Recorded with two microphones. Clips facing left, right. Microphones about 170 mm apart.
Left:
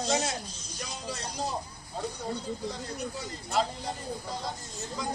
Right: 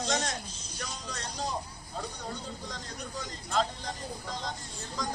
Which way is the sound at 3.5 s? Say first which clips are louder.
Left 1 dB; 10° left (ahead or behind).